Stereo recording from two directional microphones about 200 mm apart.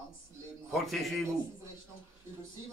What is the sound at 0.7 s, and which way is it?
Speech, centre (ahead or behind).